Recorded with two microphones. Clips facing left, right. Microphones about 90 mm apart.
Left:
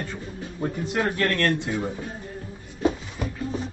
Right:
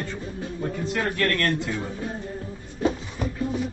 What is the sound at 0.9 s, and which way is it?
Speech, 20° left (ahead or behind).